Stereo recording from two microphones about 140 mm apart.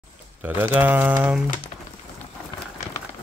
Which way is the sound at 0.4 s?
15° right (ahead or behind).